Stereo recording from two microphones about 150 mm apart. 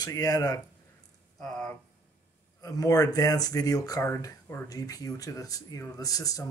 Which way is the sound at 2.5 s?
25° left (ahead or behind).